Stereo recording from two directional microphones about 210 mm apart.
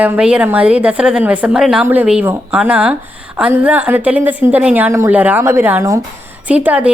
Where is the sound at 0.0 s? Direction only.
5° right (ahead or behind).